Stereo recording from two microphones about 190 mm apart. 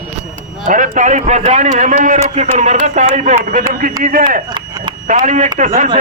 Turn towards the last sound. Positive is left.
turn(degrees=-40)  # may be behind; listen again after turning